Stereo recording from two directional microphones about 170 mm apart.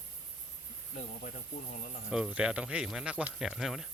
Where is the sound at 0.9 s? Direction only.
50° left (ahead or behind).